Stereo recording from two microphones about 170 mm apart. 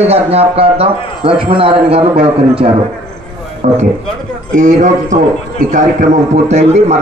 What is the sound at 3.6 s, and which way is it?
A man's voice, 40° right (ahead or behind).